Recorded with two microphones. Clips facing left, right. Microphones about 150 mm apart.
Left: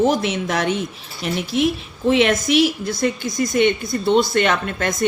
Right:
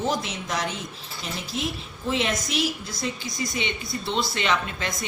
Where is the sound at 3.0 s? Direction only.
50° left (ahead or behind).